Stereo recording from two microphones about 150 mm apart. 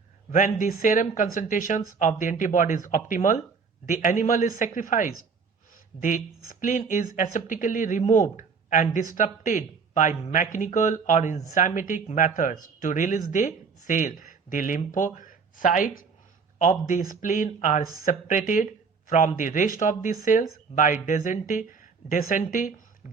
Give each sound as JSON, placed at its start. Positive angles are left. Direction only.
{"t": 0.3, "sound": "speech", "side_deg": 60}